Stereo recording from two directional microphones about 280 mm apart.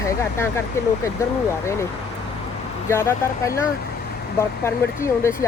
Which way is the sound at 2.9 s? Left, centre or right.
Centre.